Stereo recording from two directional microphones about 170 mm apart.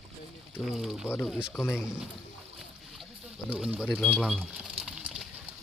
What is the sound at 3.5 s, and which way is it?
Speech, 5° right (ahead or behind).